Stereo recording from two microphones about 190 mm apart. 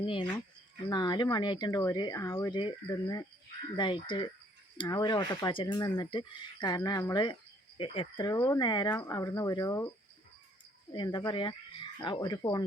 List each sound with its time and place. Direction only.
0.0 s speech: 30° left (ahead or behind)
10.9 s speech: 25° left (ahead or behind)